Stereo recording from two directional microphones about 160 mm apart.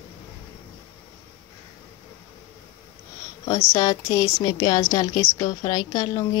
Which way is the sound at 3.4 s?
25° left (ahead or behind).